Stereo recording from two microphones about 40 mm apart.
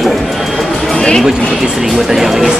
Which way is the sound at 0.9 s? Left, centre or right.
Left.